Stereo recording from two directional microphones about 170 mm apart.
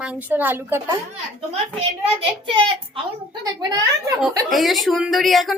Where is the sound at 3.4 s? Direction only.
25° right (ahead or behind).